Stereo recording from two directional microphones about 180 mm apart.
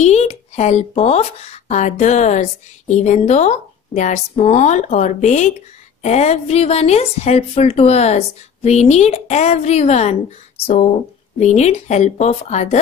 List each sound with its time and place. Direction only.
0.0 s speech: 35° left (ahead or behind)
11.3 s speech: 40° left (ahead or behind)